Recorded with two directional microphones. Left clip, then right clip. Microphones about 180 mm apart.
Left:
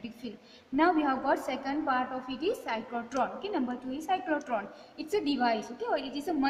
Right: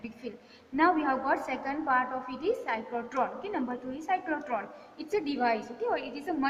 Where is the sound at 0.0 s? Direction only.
60° left (ahead or behind).